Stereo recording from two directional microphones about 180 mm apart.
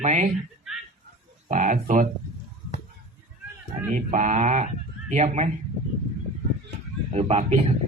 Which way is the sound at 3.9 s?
45° right (ahead or behind).